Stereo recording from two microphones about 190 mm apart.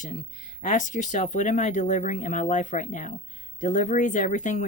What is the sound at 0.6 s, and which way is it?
Speech, 40° left (ahead or behind).